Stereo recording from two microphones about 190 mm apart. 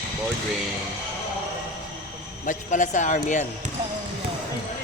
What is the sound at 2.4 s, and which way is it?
A man's voice, 40° left (ahead or behind).